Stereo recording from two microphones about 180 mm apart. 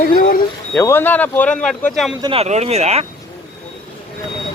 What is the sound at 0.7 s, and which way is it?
Speech, 15° left (ahead or behind).